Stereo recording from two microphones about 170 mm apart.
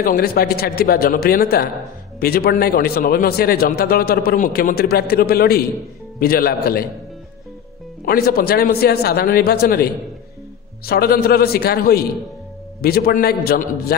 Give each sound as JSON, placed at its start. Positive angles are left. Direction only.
{"t": 0.0, "sound": "a man's voice", "side_deg": 60}
{"t": 8.0, "sound": "a man's voice", "side_deg": 60}
{"t": 10.9, "sound": "a man's voice", "side_deg": 65}